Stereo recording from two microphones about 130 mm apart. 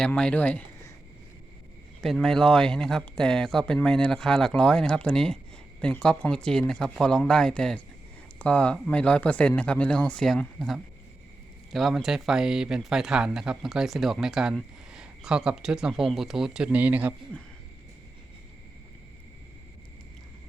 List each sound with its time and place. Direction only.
0.0 s speech: 5° left (ahead or behind)
2.0 s speech: 5° left (ahead or behind)